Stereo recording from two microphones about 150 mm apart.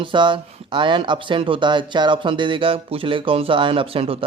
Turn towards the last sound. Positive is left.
turn(degrees=-35)  # may be behind; listen again after turning